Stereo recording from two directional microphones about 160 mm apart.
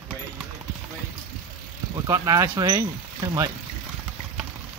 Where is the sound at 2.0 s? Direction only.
20° right (ahead or behind).